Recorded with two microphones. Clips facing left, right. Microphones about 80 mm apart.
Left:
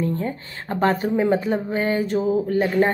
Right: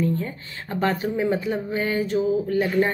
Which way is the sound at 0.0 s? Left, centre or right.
Left.